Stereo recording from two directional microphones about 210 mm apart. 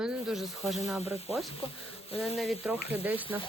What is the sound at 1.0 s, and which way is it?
Speech, 30° left (ahead or behind).